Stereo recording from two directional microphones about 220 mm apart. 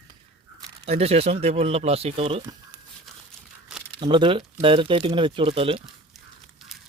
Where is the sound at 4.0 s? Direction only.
20° right (ahead or behind).